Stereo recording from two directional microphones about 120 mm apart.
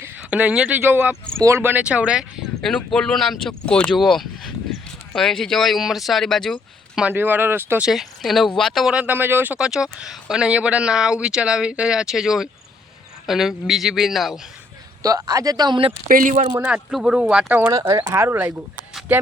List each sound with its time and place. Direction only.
0.0 s speech: 10° right (ahead or behind)
2.6 s speech: 5° left (ahead or behind)
7.0 s speech: 15° right (ahead or behind)
7.9 s speech: centre (ahead or behind)
8.9 s speech: 10° right (ahead or behind)
15.0 s speech: 30° right (ahead or behind)
16.2 s speech: 90° right
16.6 s speech: 5° right (ahead or behind)
17.7 s speech: 30° right (ahead or behind); by 19.2 s 15° right (ahead or behind)